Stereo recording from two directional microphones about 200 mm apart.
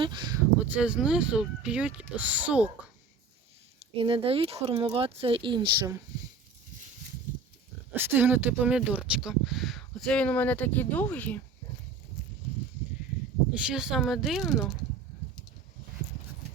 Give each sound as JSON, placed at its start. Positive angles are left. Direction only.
{"t": 0.0, "sound": "speech", "side_deg": -20}
{"t": 0.6, "sound": "speech", "side_deg": -5}
{"t": 3.9, "sound": "speech", "side_deg": -25}
{"t": 7.9, "sound": "speech", "side_deg": -10}
{"t": 13.7, "sound": "speech", "side_deg": -5}